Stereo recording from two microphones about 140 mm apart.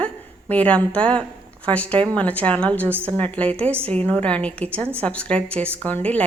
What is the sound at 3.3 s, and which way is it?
A woman's voice, 10° left (ahead or behind).